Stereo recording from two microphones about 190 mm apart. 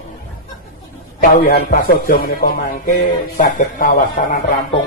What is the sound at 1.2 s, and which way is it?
A man's voice, 50° left (ahead or behind).